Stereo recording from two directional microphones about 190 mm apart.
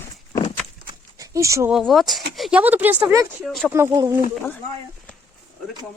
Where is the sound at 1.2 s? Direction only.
15° right (ahead or behind).